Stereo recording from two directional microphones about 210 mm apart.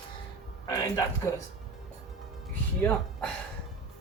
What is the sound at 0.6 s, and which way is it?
Speech, 15° left (ahead or behind).